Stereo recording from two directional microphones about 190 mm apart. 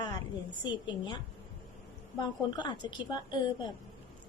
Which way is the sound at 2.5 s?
25° left (ahead or behind).